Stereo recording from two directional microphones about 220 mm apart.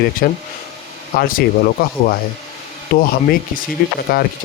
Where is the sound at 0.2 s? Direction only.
45° left (ahead or behind).